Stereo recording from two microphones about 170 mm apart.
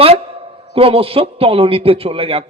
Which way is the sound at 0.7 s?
35° right (ahead or behind).